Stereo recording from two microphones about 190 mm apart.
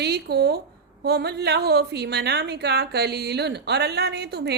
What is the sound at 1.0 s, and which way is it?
A woman's voice, 60° right (ahead or behind).